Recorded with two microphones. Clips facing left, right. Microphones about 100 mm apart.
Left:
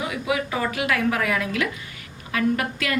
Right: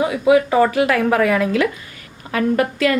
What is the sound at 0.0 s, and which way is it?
A woman's voice, 35° right (ahead or behind).